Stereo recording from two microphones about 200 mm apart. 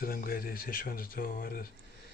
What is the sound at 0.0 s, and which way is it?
Speech, 45° left (ahead or behind).